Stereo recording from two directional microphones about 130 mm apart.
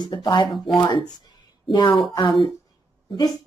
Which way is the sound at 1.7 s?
30° left (ahead or behind).